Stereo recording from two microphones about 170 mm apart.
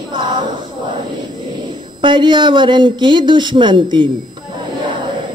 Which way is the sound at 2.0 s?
30° right (ahead or behind).